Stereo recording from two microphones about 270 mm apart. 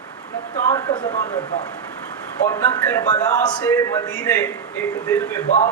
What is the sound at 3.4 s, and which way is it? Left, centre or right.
A man's voice, centre.